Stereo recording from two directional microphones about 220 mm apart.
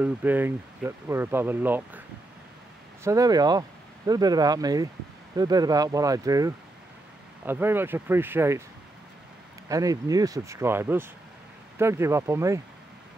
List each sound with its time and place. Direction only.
0.0 s speech: 10° right (ahead or behind)
9.7 s speech: 15° right (ahead or behind)